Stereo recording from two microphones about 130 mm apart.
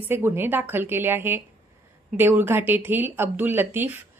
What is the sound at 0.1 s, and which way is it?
A woman's voice, 15° right (ahead or behind).